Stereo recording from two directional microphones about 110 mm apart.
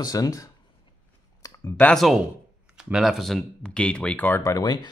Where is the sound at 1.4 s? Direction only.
30° left (ahead or behind).